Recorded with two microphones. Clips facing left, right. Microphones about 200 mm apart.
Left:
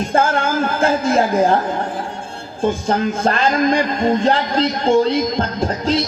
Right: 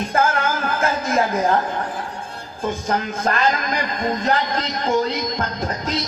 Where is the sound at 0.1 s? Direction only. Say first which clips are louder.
Left 4 dB; 30° left (ahead or behind).